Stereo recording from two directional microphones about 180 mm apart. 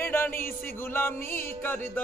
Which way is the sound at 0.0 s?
15° left (ahead or behind).